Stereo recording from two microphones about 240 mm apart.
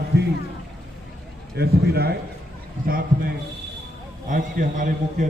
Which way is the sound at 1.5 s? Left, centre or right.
Right.